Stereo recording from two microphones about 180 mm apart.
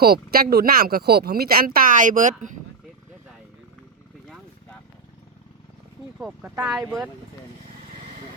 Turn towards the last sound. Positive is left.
turn(degrees=-15)  # may be behind; listen again after turning